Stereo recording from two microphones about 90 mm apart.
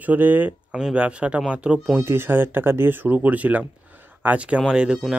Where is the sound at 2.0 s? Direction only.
25° right (ahead or behind).